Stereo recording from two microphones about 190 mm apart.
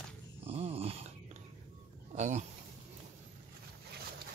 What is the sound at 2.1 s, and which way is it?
Speech, 40° right (ahead or behind).